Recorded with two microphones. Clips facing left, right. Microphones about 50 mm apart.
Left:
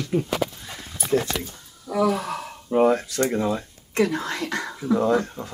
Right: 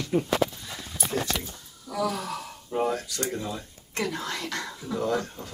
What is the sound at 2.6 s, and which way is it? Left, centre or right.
Speech, left.